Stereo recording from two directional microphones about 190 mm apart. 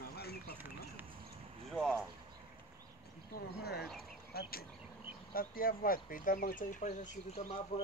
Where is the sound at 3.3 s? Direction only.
55° left (ahead or behind).